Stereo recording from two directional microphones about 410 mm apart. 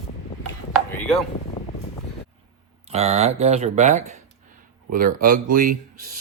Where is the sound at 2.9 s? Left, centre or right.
Centre.